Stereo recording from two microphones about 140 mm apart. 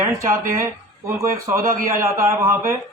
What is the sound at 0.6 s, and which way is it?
A man's voice, 20° right (ahead or behind).